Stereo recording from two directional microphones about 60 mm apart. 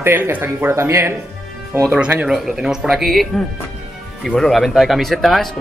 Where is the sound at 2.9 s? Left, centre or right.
Centre.